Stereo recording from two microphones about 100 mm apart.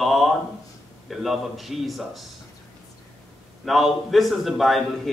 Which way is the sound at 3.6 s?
Centre (ahead or behind).